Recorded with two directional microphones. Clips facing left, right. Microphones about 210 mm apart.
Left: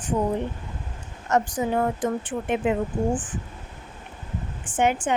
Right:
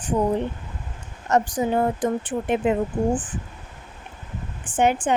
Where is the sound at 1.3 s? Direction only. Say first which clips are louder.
Right 2 dB; 30° right (ahead or behind).